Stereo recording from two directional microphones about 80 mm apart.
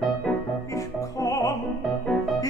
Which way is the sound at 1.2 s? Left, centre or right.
Left.